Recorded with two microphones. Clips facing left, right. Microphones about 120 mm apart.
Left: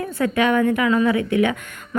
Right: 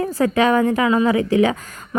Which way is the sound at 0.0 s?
35° right (ahead or behind).